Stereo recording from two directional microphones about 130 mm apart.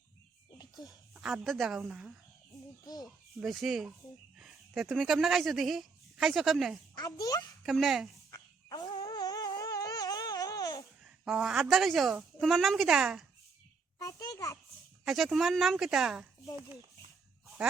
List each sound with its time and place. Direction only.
0.6 s a sound: 30° left (ahead or behind)
1.1 s a woman's voice: centre (ahead or behind)
2.8 s a child's voice: 30° left (ahead or behind)
3.4 s a woman's voice: centre (ahead or behind)
6.9 s a child's voice: 30° left (ahead or behind)
7.6 s speech: centre (ahead or behind)
8.3 s a sound: 25° left (ahead or behind)
11.3 s a woman's voice: 5° right (ahead or behind)
14.0 s a child's voice: 25° left (ahead or behind)
15.0 s a woman's voice: centre (ahead or behind)